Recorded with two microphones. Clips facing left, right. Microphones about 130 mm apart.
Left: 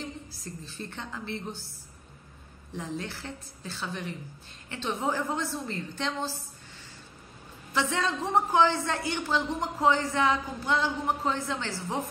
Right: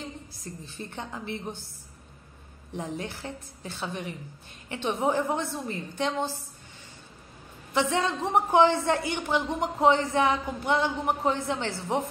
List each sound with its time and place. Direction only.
0.7 s a woman's voice: 20° right (ahead or behind)
2.7 s a woman's voice: 20° right (ahead or behind)
7.7 s a woman's voice: 20° right (ahead or behind)